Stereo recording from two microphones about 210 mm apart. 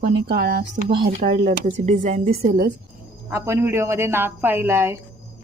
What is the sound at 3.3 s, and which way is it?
Speech, 10° right (ahead or behind).